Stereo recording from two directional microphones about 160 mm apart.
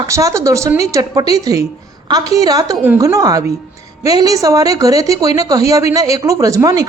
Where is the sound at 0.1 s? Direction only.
20° right (ahead or behind).